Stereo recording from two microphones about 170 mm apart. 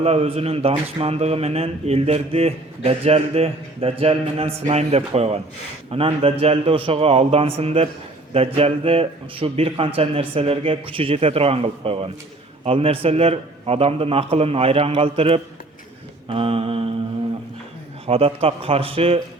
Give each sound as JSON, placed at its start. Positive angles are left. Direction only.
{"t": 0.0, "sound": "speech", "side_deg": -35}
{"t": 18.0, "sound": "speech", "side_deg": -35}